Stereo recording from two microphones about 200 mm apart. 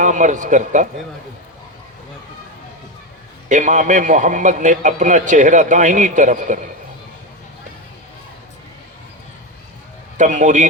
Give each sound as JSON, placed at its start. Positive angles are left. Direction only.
{"t": 0.0, "sound": "a man's voice", "side_deg": -40}
{"t": 3.5, "sound": "a man's voice", "side_deg": -40}
{"t": 10.2, "sound": "a man's voice", "side_deg": -40}